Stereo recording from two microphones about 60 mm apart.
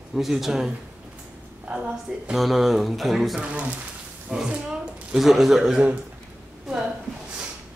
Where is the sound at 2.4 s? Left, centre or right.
Centre.